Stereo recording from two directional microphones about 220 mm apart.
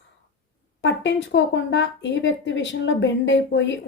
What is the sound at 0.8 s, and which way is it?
Speech, 55° left (ahead or behind).